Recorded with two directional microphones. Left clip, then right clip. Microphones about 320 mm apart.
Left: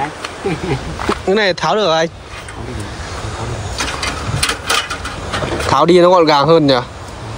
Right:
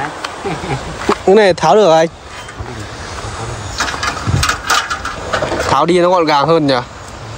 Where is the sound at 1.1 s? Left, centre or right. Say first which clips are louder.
Right 6 dB; centre.